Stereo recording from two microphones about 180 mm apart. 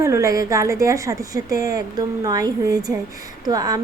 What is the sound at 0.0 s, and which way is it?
A woman's voice, 15° right (ahead or behind).